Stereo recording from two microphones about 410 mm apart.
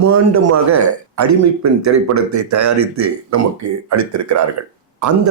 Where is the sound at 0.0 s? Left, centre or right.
Right.